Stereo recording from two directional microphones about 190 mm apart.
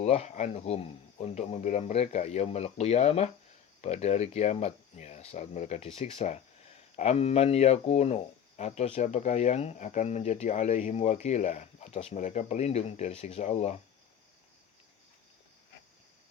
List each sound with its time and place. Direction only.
0.0 s speech: 35° left (ahead or behind)